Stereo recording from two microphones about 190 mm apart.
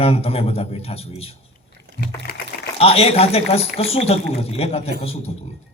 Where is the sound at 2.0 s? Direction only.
55° left (ahead or behind).